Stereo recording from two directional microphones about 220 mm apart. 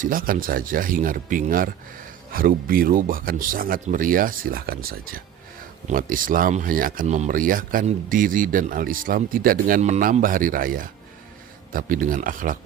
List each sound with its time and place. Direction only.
0.0 s speech: 40° right (ahead or behind)